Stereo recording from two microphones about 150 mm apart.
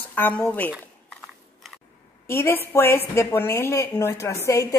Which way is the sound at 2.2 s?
15° left (ahead or behind).